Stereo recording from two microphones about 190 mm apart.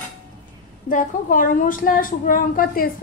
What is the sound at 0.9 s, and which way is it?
A woman's voice, 45° left (ahead or behind).